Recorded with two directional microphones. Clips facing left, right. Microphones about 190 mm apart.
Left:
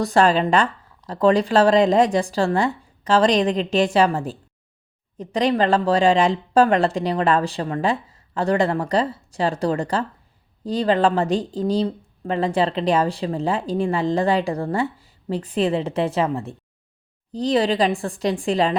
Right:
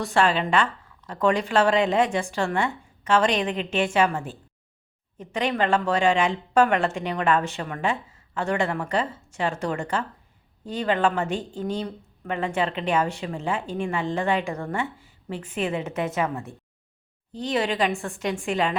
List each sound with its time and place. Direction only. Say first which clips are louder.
0.0 s speech: left 5 dB; 40° left (ahead or behind)